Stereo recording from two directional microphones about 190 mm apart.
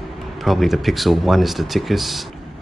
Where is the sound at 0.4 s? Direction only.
Centre (ahead or behind).